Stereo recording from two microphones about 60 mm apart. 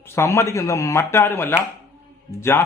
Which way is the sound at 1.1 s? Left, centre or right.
Left.